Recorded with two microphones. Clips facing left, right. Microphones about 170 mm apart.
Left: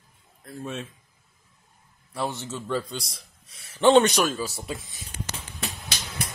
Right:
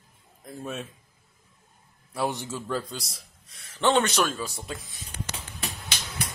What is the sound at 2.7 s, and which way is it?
Speech, centre (ahead or behind).